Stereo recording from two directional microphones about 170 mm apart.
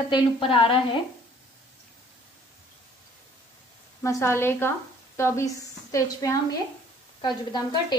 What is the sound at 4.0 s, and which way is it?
A woman's voice, 15° left (ahead or behind).